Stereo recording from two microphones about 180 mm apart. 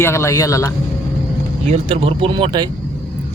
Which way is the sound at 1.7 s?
30° right (ahead or behind).